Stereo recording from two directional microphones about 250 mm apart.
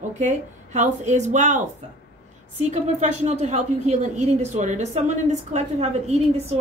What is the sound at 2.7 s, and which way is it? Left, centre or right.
A woman's voice, right.